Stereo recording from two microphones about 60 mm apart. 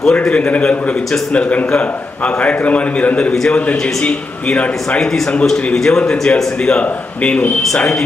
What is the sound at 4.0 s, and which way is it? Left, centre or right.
A man's voice, centre.